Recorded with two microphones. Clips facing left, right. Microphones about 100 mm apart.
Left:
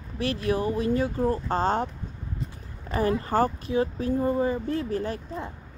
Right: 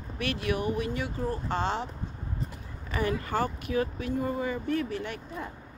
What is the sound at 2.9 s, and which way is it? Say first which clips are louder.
Speech: left 5 dB; 35° left (ahead or behind).